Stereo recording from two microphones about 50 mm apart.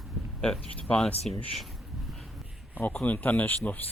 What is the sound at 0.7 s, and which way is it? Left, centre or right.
Speech, left.